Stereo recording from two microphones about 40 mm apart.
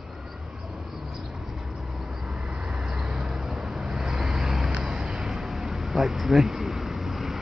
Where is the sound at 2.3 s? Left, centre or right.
Right.